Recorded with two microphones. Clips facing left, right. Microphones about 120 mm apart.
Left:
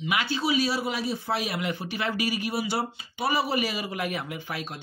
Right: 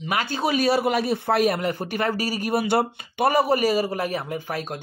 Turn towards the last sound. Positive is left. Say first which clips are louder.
# right 6 dB
turn(degrees=-45)  # may be behind; listen again after turning